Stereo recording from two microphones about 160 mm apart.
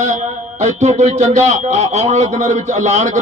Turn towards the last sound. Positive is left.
turn(degrees=-50)  # may be behind; listen again after turning